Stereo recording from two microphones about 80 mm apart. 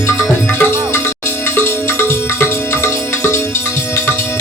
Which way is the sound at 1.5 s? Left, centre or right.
Left.